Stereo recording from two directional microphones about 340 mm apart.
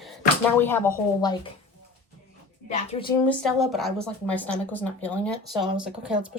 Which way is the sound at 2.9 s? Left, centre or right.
Centre.